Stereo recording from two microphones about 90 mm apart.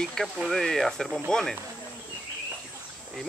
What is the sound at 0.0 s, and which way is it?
Speech, 5° left (ahead or behind).